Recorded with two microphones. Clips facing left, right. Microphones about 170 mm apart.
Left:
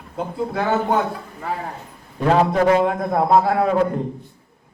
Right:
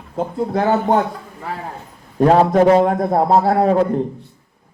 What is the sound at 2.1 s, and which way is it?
A man's voice, 35° right (ahead or behind).